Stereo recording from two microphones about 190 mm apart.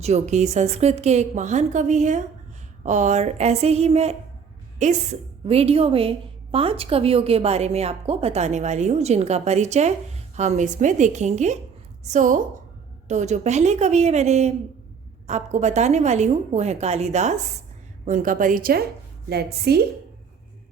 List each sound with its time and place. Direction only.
0.0 s a woman's voice: 35° right (ahead or behind); by 19.8 s 60° right (ahead or behind)